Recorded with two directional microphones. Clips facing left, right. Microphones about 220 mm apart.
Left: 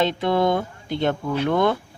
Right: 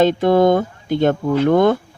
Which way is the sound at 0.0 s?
45° right (ahead or behind).